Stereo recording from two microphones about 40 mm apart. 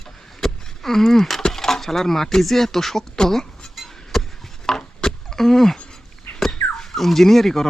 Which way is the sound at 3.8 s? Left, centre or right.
Centre.